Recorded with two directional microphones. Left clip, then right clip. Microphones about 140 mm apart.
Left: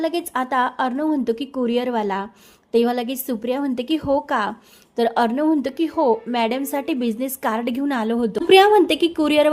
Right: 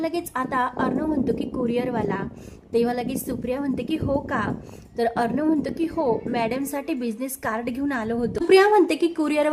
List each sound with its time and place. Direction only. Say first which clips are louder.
0.0 s a woman's voice: left 4 dB; 30° left (ahead or behind)